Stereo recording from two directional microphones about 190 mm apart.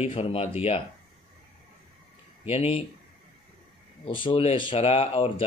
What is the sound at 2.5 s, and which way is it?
Speech, 30° left (ahead or behind).